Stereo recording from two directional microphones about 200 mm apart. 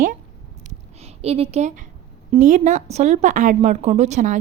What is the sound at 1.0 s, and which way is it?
A woman's voice, 30° right (ahead or behind).